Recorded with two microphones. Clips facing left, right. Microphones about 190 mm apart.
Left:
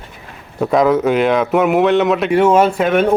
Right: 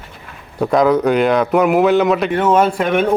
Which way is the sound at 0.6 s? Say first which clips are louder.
Even; centre (ahead or behind).